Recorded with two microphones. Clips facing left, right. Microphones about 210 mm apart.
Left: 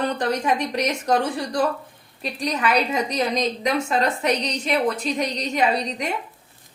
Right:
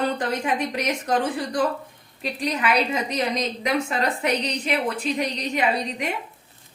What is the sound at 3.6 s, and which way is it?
A woman's voice, 40° left (ahead or behind).